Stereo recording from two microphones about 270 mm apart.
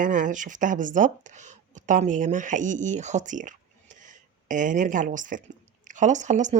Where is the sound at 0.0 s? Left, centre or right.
Right.